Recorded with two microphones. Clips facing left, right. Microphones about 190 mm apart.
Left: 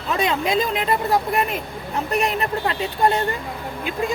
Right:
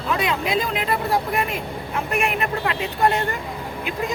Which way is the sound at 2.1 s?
35° left (ahead or behind).